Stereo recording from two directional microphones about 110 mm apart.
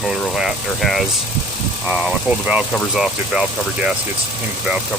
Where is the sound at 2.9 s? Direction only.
5° right (ahead or behind).